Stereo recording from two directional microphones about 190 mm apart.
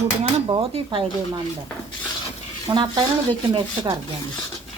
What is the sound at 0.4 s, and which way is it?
Speech, 25° right (ahead or behind).